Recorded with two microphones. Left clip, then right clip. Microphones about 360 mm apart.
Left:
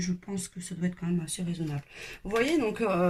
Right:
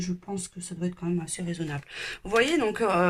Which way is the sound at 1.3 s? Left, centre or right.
Right.